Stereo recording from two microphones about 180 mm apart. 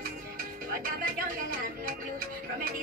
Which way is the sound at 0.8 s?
50° right (ahead or behind).